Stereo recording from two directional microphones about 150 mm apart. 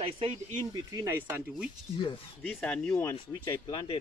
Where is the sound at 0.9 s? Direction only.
15° right (ahead or behind).